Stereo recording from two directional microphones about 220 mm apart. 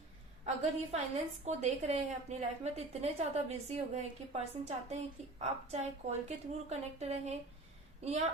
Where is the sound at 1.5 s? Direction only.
30° right (ahead or behind).